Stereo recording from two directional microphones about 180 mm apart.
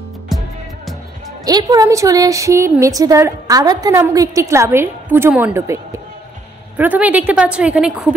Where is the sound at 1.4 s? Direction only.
20° right (ahead or behind).